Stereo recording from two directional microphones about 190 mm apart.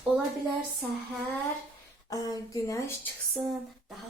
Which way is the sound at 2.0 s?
20° left (ahead or behind).